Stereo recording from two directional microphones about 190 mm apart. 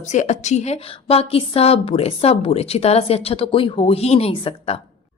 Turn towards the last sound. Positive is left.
turn(degrees=30)  # may be behind; listen again after turning